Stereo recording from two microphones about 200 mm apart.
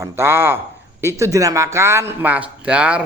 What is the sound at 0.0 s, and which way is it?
Speech, 10° right (ahead or behind).